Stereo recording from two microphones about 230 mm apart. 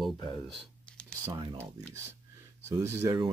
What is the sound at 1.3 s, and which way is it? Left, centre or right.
Speech, centre.